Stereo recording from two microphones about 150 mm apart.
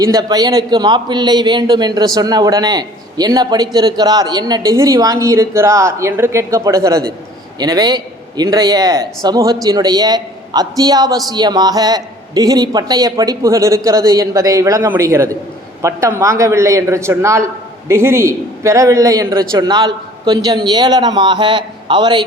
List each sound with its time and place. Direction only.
0.0 s a man's voice: 25° right (ahead or behind)